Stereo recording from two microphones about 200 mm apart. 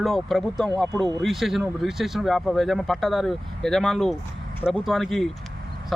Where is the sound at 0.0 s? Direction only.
Centre (ahead or behind).